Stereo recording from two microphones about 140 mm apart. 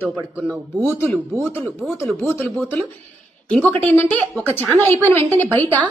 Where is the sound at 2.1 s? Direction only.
15° left (ahead or behind).